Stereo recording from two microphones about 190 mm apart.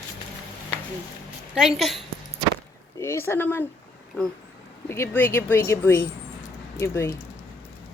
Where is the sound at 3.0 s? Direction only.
15° left (ahead or behind).